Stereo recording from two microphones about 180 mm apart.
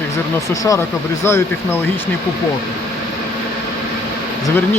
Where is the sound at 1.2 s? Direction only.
15° left (ahead or behind).